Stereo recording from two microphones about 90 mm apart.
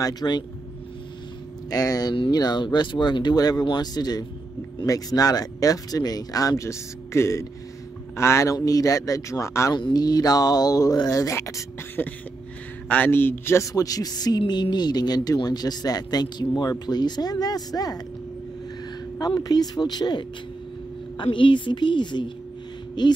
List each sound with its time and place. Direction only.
0.0 s speech: 50° left (ahead or behind)
1.7 s a woman's voice: 45° left (ahead or behind); by 3.3 s 60° left (ahead or behind)
3.3 s speech: 45° left (ahead or behind)
9.8 s speech: 55° left (ahead or behind); by 11.6 s 35° left (ahead or behind)
12.0 s speech: 20° left (ahead or behind)
13.7 s speech: 45° left (ahead or behind)
14.4 s speech: 55° left (ahead or behind)
19.4 s speech: 45° left (ahead or behind)
21.2 s a woman's voice: 70° left (ahead or behind)